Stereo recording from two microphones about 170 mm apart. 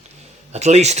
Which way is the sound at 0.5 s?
40° right (ahead or behind).